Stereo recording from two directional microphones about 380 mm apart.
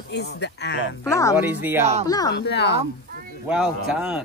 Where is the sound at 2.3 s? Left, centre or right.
Left.